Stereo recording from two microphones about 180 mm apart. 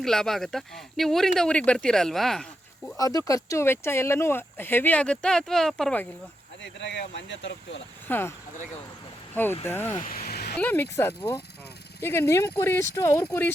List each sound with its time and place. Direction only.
0.0 s speech: centre (ahead or behind)
3.0 s speech: 20° left (ahead or behind)
6.6 s speech: 75° left (ahead or behind); by 7.8 s 90° left
8.0 s speech: 10° left (ahead or behind)
9.3 s speech: 10° left (ahead or behind)
10.1 s vehicle: 55° left (ahead or behind)
10.6 s speech: 10° left (ahead or behind)
12.5 s speech: 15° left (ahead or behind)